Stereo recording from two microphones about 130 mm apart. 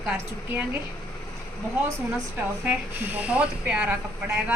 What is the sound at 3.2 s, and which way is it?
Speech, 10° right (ahead or behind).